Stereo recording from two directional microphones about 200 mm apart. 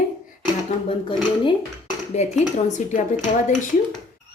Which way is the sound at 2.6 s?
40° left (ahead or behind).